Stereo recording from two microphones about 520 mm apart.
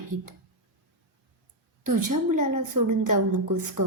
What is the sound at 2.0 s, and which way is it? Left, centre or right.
A woman's voice, right.